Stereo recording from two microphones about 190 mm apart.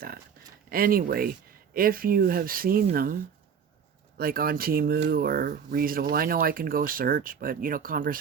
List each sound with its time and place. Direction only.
0.7 s speech: 50° right (ahead or behind)
4.2 s speech: 50° right (ahead or behind)